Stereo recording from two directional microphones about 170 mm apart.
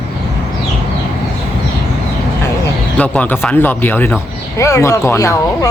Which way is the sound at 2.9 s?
10° left (ahead or behind).